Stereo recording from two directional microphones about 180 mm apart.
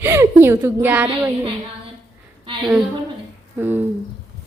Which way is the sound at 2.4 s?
25° right (ahead or behind).